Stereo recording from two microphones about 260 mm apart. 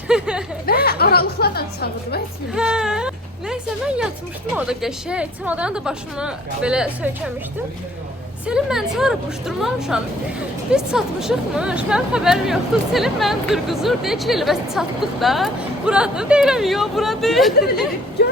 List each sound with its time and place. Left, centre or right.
0.1 s speech: centre
0.6 s a woman's voice: left
2.5 s speech: centre
8.4 s speech: centre
18.2 s a sound: left